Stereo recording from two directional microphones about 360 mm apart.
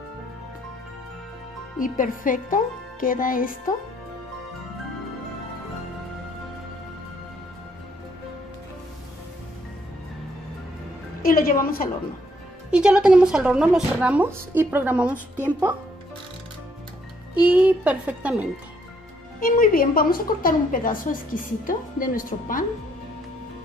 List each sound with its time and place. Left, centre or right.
1.8 s a woman's voice: left
11.2 s a woman's voice: left
12.7 s a woman's voice: centre
17.3 s a woman's voice: centre
19.4 s a woman's voice: left